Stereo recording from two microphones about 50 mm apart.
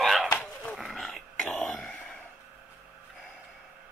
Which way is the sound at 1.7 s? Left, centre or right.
Centre.